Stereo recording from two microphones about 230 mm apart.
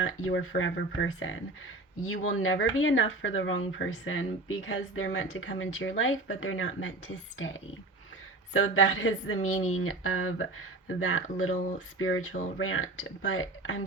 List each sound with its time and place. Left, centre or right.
0.0 s speech: left